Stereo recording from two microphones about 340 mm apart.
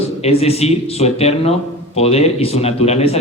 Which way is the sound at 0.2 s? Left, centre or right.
Centre.